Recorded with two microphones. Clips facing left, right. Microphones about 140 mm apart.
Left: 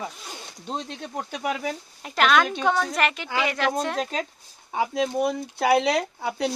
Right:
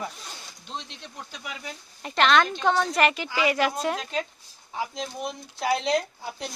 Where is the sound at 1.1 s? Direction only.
65° left (ahead or behind).